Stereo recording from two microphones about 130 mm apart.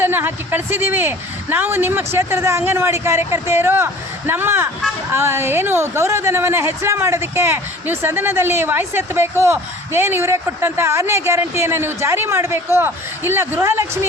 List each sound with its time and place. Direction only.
0.0 s a woman's voice: 15° right (ahead or behind)